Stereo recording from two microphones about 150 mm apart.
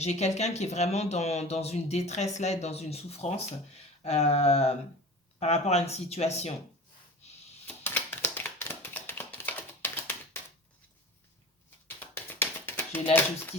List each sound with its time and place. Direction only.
0.0 s speech: 50° left (ahead or behind)
7.7 s tap: 15° left (ahead or behind)
11.9 s tap: 15° left (ahead or behind)